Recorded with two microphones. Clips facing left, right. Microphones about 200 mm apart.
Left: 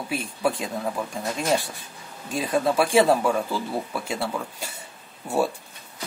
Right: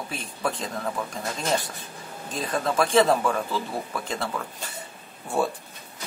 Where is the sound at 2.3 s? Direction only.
10° left (ahead or behind).